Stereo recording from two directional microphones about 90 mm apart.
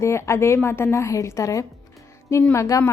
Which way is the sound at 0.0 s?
30° left (ahead or behind).